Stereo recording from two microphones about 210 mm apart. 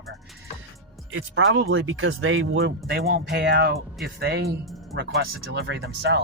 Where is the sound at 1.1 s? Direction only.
70° right (ahead or behind).